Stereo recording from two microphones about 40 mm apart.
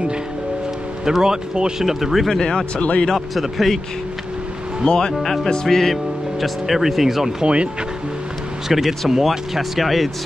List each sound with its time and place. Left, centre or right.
1.0 s speech: centre
1.9 s speech: centre
2.8 s speech: left
3.3 s speech: centre
4.8 s speech: centre
6.4 s speech: centre
8.6 s speech: centre